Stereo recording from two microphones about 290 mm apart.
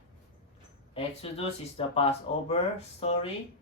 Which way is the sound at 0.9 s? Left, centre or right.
Centre.